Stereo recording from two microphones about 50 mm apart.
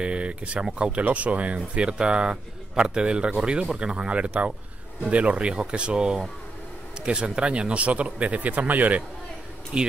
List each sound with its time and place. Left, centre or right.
0.0 s speech: right
9.7 s speech: right